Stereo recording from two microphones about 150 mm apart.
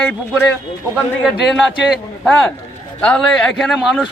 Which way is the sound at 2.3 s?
5° left (ahead or behind).